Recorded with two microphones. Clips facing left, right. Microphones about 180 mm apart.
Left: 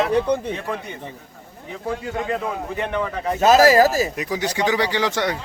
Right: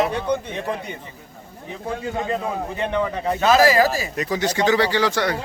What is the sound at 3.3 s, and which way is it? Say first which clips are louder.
Speech: left 3 dB; 40° left (ahead or behind).